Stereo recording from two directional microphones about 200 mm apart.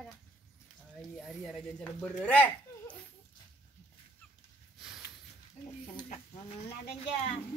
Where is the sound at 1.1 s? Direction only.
Centre (ahead or behind).